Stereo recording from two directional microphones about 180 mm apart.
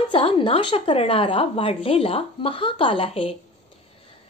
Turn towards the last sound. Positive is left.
turn(degrees=30)  # may be behind; listen again after turning